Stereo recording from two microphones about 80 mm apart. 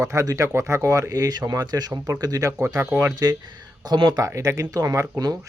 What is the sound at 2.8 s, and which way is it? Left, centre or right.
Speech, right.